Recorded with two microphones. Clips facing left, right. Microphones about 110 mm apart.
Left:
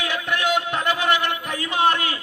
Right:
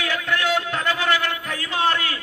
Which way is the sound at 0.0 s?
20° left (ahead or behind).